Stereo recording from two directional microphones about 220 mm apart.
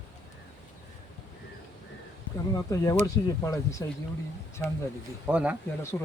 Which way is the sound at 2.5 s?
15° left (ahead or behind).